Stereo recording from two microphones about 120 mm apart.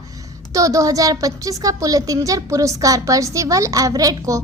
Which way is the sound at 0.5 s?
30° right (ahead or behind).